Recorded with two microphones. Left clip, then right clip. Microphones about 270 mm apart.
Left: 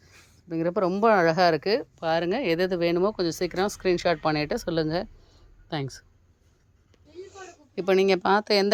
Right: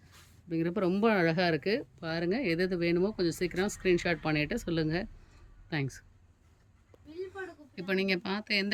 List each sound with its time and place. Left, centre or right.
0.5 s speech: centre
5.7 s speech: centre
7.8 s speech: centre